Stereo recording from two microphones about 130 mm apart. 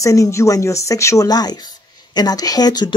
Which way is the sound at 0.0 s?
25° left (ahead or behind).